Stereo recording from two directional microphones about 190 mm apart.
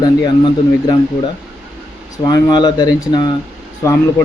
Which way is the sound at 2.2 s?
20° left (ahead or behind).